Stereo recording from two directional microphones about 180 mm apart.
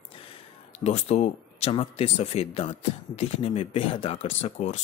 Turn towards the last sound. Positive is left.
turn(degrees=35)  # may be behind; listen again after turning